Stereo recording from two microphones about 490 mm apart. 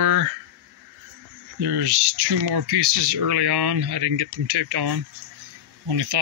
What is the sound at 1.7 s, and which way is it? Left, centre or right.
Speech, right.